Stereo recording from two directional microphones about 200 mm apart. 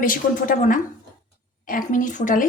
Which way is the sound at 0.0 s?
45° left (ahead or behind).